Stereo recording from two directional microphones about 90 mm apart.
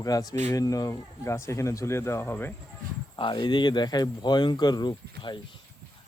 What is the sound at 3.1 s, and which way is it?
Speech, 60° left (ahead or behind).